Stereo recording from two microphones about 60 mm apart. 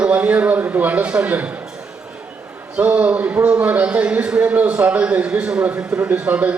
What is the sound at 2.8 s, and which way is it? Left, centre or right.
A man's voice, right.